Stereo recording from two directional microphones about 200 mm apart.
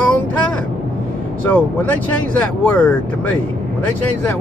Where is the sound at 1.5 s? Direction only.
10° left (ahead or behind).